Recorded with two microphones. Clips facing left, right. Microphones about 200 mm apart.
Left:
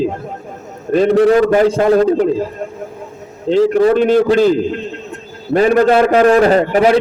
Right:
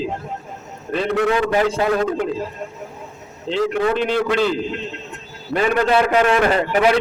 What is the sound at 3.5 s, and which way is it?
A man's voice, 40° left (ahead or behind).